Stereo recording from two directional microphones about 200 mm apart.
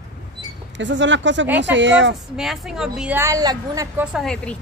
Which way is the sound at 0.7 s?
65° right (ahead or behind).